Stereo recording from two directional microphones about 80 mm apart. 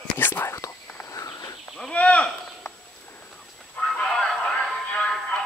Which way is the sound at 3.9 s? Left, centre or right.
Centre.